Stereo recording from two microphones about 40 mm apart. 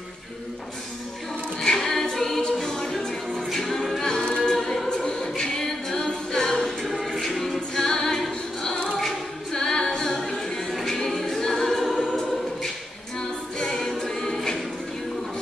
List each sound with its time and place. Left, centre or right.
1.6 s music: centre
4.5 s a capella: centre
13.6 s music: centre